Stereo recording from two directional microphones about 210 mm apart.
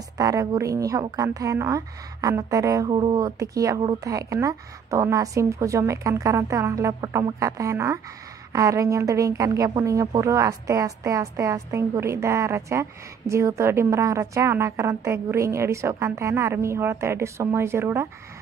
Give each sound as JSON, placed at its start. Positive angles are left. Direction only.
{"t": 0.2, "sound": "speech", "side_deg": -15}